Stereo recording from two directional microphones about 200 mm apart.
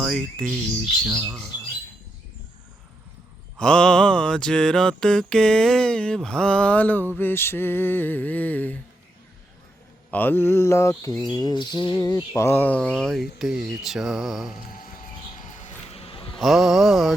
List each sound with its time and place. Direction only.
0.0 s mantra: 5° left (ahead or behind)
1.1 s speech: 10° right (ahead or behind)
3.6 s mantra: 5° left (ahead or behind)
10.1 s mantra: 10° left (ahead or behind)
11.1 s mantra: centre (ahead or behind)
11.3 s music: 20° left (ahead or behind)
12.3 s mantra: 10° left (ahead or behind)
15.4 s music: 35° left (ahead or behind)
16.4 s mantra: centre (ahead or behind)